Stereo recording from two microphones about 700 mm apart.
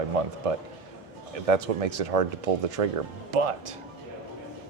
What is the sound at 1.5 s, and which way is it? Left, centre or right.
Speech, right.